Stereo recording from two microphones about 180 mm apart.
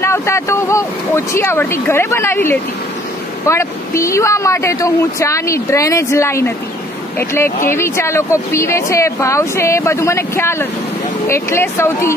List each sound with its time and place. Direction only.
0.0 s speech: 15° left (ahead or behind)